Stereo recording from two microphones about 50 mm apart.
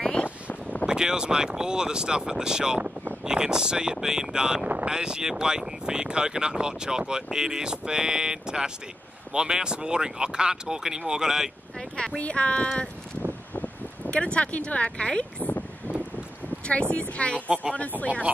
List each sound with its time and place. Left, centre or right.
0.0 s a sound: left
0.8 s speech: centre
12.2 s speech: left
14.1 s speech: left
16.9 s speech: left